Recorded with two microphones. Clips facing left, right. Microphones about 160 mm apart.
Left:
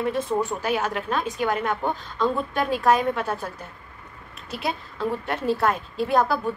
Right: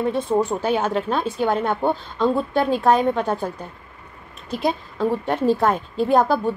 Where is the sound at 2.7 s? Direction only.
20° right (ahead or behind).